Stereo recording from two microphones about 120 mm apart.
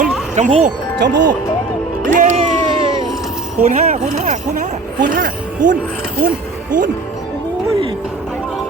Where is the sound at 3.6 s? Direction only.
85° right.